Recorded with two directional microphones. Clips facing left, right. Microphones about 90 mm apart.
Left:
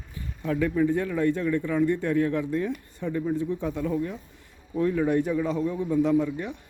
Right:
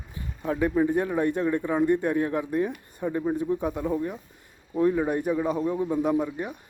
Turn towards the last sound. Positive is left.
turn(degrees=-20)  # may be behind; listen again after turning